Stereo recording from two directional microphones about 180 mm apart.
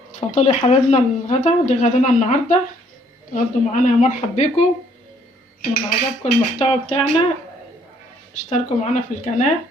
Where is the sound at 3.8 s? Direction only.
40° left (ahead or behind).